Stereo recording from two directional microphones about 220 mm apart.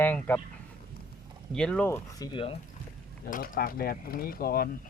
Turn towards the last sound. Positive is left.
turn(degrees=40)  # may be behind; listen again after turning